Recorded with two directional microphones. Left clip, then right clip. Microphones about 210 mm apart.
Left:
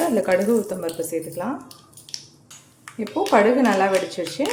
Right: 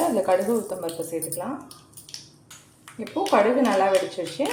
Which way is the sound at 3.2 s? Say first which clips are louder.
Left 2 dB; 30° left (ahead or behind).